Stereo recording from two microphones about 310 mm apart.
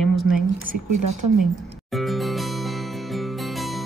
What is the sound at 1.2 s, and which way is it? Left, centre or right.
Speech, right.